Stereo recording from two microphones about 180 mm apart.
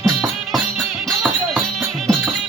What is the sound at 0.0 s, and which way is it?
Music, centre (ahead or behind).